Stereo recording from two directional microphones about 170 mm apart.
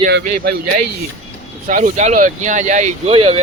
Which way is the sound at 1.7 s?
50° right (ahead or behind).